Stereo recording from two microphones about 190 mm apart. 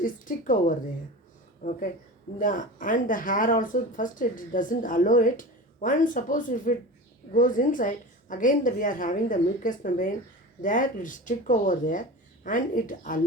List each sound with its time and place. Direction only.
0.0 s speech: 45° left (ahead or behind)